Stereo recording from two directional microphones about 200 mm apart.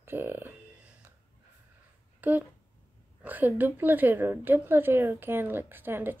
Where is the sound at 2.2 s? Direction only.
10° right (ahead or behind).